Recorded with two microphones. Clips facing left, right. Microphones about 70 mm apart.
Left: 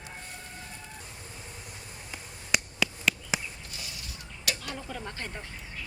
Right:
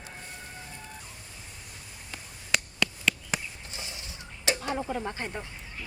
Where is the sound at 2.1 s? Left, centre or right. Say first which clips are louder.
Even; centre.